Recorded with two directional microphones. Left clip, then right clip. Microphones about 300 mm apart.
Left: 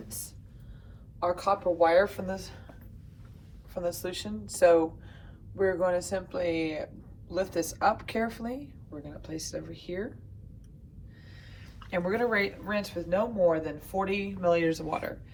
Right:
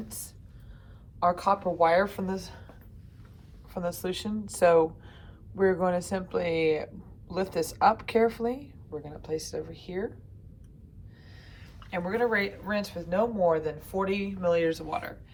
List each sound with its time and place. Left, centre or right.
1.2 s a woman's voice: right
3.8 s a woman's voice: centre
11.9 s speech: centre